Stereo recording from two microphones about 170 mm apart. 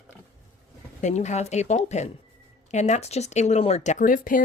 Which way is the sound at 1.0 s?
45° left (ahead or behind).